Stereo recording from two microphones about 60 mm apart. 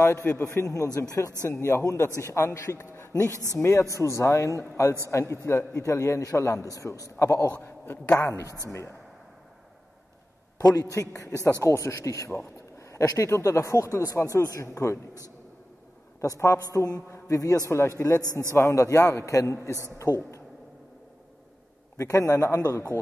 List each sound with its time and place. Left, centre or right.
0.0 s a man's voice: left
0.5 s speech: left
1.5 s a man's voice: left
3.1 s a man's voice: left
5.8 s speech: left
7.6 s speech: left
8.2 s a man's voice: left
10.8 s speech: left
16.3 s a man's voice: left
16.6 s a man's voice: left
17.6 s a man's voice: left
18.2 s a man's voice: right
18.6 s speech: left
21.9 s a man's voice: left